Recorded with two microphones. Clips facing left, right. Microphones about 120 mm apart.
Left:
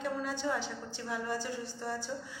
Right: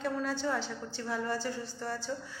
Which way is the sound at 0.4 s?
10° left (ahead or behind).